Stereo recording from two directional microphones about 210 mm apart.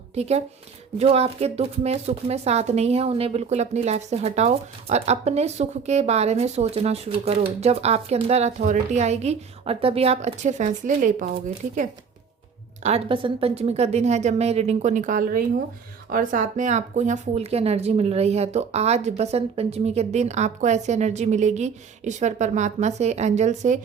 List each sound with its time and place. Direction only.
0.1 s speech: 30° right (ahead or behind)
12.8 s speech: 30° right (ahead or behind)